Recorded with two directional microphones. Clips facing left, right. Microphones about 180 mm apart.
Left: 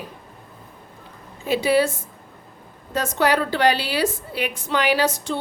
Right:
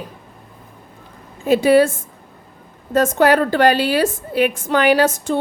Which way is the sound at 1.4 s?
50° right (ahead or behind).